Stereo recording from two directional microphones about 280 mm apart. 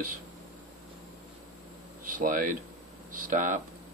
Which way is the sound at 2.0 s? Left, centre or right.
Right.